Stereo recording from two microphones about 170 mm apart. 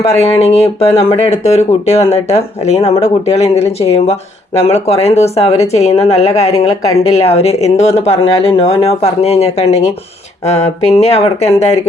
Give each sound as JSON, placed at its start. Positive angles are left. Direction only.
{"t": 0.3, "sound": "speech", "side_deg": 35}